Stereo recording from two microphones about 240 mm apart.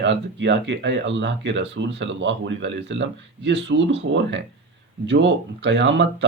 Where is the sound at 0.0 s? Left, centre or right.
Right.